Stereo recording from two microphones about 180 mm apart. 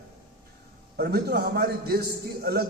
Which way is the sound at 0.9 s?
60° right (ahead or behind).